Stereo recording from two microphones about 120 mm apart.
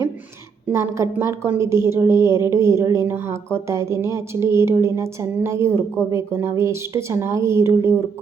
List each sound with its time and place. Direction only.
0.7 s a woman's voice: 20° right (ahead or behind)